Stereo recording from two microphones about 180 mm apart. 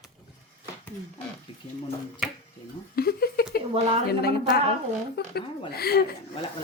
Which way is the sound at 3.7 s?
35° right (ahead or behind).